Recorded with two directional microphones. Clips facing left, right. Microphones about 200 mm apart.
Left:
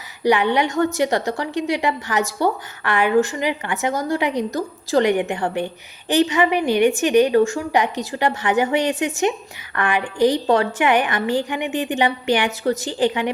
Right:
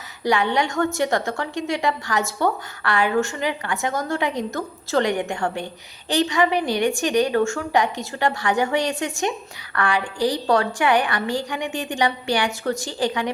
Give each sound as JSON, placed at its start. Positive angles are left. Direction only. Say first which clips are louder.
{"t": 0.3, "sound": "a woman's voice", "louder": "left 3 dB", "side_deg": 15}